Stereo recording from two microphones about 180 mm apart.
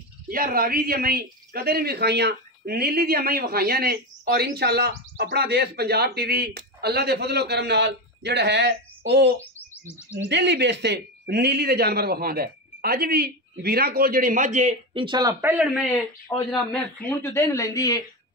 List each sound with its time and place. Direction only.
0.3 s speech: 55° right (ahead or behind); by 9.3 s 70° right (ahead or behind)
9.8 s speech: 15° left (ahead or behind)
10.2 s speech: 75° right (ahead or behind); by 15.0 s 40° right (ahead or behind)
15.0 s speech: 20° right (ahead or behind)
15.5 s speech: 5° right (ahead or behind)
16.5 s speech: 10° left (ahead or behind)